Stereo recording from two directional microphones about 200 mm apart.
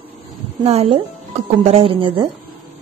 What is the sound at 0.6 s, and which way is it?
Speech, 30° right (ahead or behind).